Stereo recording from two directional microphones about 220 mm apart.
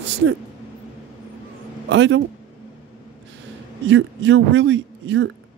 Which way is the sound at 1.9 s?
55° right (ahead or behind).